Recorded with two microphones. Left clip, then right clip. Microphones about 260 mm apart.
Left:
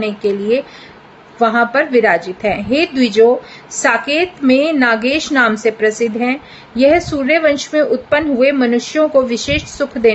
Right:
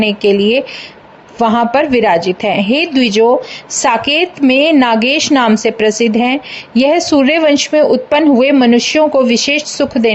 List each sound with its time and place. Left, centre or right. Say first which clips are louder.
0.0 s a woman's voice: right 6 dB; right